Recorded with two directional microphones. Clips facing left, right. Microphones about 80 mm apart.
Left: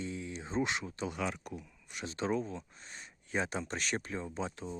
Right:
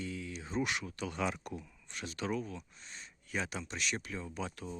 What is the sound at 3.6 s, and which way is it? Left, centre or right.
Speech, left.